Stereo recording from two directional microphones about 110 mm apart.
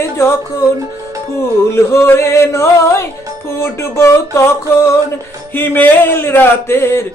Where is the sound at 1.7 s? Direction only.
25° left (ahead or behind).